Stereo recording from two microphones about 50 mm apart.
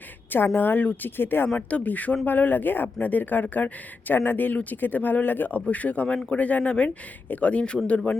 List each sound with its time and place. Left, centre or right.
0.3 s a woman's voice: left
1.5 s a woman's voice: left